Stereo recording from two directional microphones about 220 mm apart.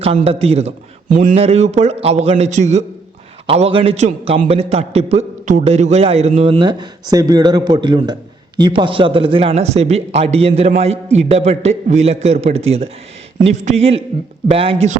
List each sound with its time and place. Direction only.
0.0 s a man's voice: 25° right (ahead or behind)